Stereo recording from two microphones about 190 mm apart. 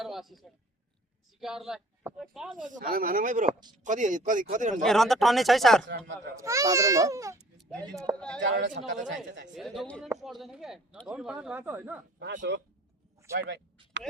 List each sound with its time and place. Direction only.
0.0 s a man's voice: centre (ahead or behind)
2.6 s speech: 45° right (ahead or behind)
4.8 s a man's voice: centre (ahead or behind)
5.9 s speech: 65° right (ahead or behind)
6.3 s a child's voice: 15° right (ahead or behind)
8.4 s speech: 70° right (ahead or behind)
9.6 s a man's voice: centre (ahead or behind)
12.2 s speech: 65° right (ahead or behind)
13.3 s a child's voice: 15° right (ahead or behind)